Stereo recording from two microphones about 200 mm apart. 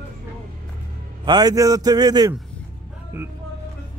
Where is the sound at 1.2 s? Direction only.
20° right (ahead or behind).